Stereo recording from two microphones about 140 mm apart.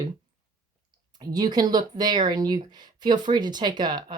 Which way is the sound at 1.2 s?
30° right (ahead or behind).